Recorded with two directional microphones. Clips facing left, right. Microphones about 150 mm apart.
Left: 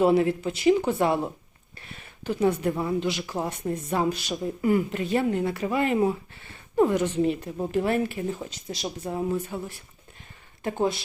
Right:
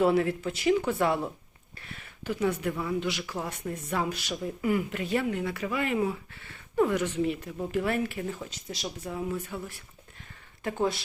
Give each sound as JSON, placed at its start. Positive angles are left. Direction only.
{"t": 0.0, "sound": "speech", "side_deg": 20}